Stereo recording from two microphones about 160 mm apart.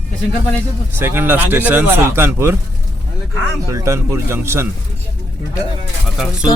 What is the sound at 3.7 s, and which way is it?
Speech, 20° right (ahead or behind).